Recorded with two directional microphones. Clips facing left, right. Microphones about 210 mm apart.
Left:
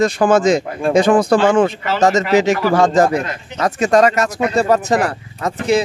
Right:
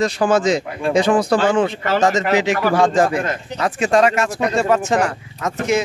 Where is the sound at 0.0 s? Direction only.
50° left (ahead or behind).